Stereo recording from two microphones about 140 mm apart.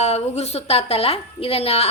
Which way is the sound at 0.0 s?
50° left (ahead or behind).